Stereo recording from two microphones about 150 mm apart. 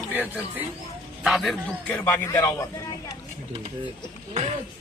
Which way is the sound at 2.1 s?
20° left (ahead or behind).